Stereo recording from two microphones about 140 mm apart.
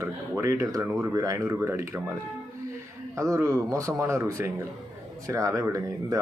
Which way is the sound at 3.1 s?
20° right (ahead or behind).